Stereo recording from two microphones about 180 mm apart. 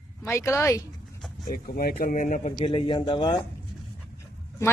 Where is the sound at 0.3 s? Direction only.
15° left (ahead or behind).